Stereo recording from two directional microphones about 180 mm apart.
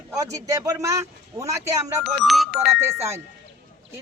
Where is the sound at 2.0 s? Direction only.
Centre (ahead or behind).